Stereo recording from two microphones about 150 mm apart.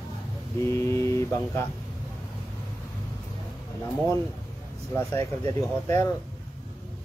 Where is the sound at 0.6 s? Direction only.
20° left (ahead or behind).